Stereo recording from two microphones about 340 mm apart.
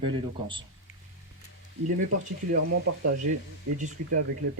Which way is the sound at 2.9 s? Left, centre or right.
Right.